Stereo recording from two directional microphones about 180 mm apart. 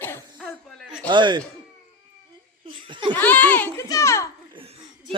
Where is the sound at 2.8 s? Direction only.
25° right (ahead or behind).